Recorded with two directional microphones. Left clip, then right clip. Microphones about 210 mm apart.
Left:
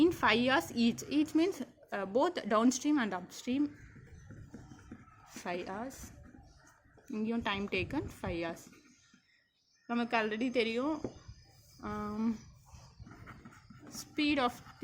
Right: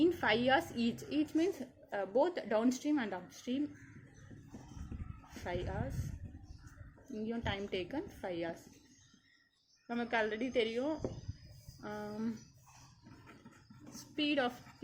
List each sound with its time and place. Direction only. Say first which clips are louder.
0.0 s speech: left 3 dB; 50° left (ahead or behind)
5.3 s speech: left 2 dB; 50° left (ahead or behind)
7.1 s speech: left 4 dB; 50° left (ahead or behind)
9.8 s speech: left 2 dB; 55° left (ahead or behind)
13.9 s a sound: left 2 dB; 50° left (ahead or behind)